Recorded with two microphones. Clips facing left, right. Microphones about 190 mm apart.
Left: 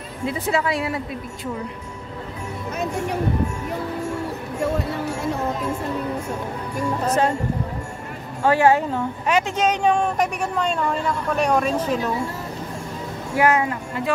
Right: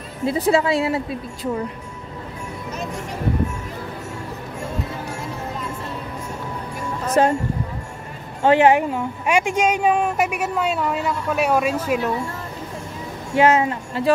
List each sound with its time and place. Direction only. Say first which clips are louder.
0.3 s speech: right 5 dB; 30° right (ahead or behind)
7.2 s speech: right 5 dB; 35° right (ahead or behind)
8.5 s a woman's voice: right 2 dB; 20° right (ahead or behind)
13.4 s speech: right 3 dB; 25° right (ahead or behind)